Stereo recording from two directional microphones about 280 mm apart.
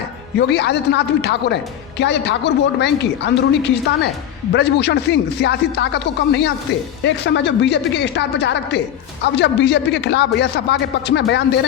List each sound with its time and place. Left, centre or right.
0.3 s a woman's voice: left